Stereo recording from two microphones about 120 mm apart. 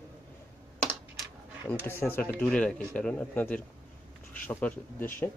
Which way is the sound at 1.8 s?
20° left (ahead or behind).